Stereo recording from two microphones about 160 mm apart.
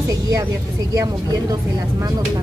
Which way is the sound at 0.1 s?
20° right (ahead or behind).